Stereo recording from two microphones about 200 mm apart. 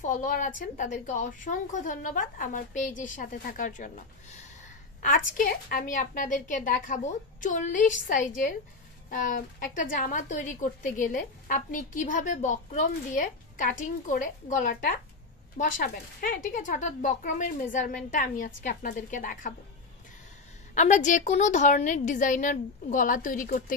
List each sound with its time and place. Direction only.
0.0 s a woman's voice: 40° left (ahead or behind)
20.7 s a woman's voice: 35° left (ahead or behind)